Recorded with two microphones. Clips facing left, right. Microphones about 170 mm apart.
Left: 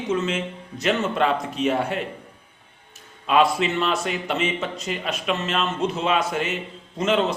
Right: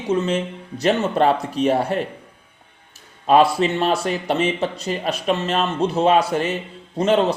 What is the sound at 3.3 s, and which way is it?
Speech, 35° right (ahead or behind).